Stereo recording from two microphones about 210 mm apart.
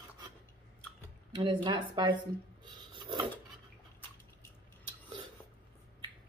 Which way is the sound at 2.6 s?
20° right (ahead or behind).